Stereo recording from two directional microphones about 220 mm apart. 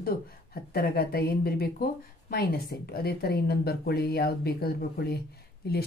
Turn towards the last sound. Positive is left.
turn(degrees=45)  # may be behind; listen again after turning